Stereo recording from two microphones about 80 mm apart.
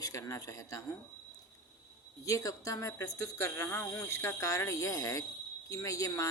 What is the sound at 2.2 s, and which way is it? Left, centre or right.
Speech, left.